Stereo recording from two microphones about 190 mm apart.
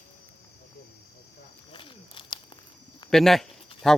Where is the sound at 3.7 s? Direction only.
30° left (ahead or behind).